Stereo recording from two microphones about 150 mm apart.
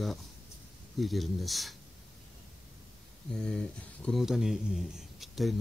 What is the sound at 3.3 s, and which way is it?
Speech, 5° left (ahead or behind).